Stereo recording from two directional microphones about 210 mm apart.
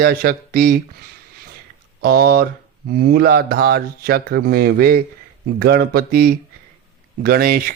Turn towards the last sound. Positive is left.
turn(degrees=-45)  # may be behind; listen again after turning